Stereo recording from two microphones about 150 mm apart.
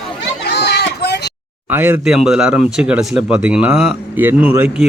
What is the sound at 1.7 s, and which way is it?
Speech, 10° right (ahead or behind).